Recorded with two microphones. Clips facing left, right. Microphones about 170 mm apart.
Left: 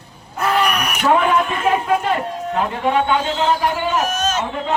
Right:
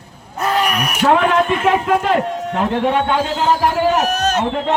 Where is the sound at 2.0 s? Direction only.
75° right (ahead or behind).